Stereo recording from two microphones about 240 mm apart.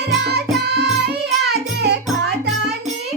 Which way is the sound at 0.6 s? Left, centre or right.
Right.